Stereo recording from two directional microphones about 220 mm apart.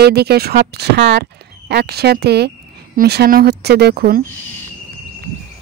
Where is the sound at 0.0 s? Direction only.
45° right (ahead or behind).